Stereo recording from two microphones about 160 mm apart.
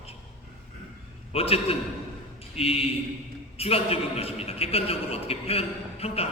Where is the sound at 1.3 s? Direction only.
40° left (ahead or behind).